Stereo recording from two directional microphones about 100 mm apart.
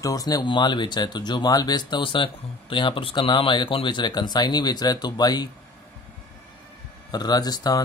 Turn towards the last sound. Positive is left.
turn(degrees=40)  # may be behind; listen again after turning